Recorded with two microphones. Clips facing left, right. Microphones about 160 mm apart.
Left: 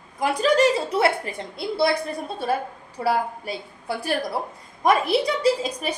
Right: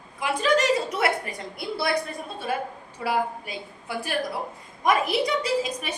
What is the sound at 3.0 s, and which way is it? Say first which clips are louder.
A woman's voice: left 3 dB; 35° left (ahead or behind).